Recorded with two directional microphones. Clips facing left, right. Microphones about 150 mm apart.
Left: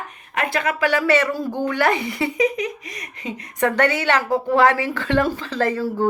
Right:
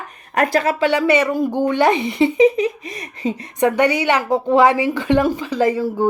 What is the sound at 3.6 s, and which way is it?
A woman's voice, 15° right (ahead or behind).